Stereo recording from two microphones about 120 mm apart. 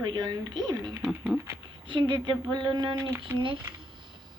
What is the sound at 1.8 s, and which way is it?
A woman's voice, 40° right (ahead or behind).